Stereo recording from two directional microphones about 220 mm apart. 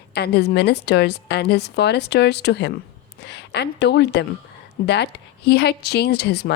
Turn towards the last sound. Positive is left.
turn(degrees=50)  # may be behind; listen again after turning